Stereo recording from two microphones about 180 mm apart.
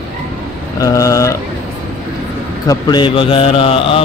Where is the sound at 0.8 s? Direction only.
20° left (ahead or behind).